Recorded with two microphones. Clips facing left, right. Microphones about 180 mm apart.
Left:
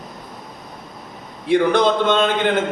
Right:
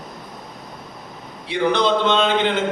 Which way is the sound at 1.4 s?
50° left (ahead or behind).